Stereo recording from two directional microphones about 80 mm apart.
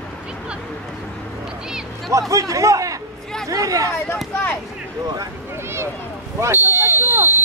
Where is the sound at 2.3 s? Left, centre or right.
Right.